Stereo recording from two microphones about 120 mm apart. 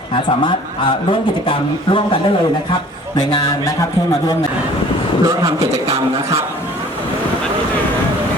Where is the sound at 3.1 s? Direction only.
35° left (ahead or behind).